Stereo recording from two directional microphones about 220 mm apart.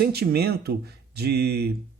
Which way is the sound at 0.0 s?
45° right (ahead or behind).